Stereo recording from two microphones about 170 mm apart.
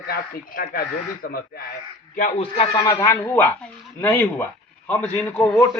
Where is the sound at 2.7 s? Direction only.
25° left (ahead or behind).